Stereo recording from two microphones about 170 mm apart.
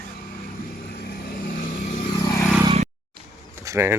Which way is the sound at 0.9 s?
70° left (ahead or behind).